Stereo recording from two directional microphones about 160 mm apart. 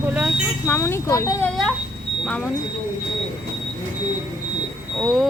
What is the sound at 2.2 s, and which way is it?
Speech, 5° left (ahead or behind).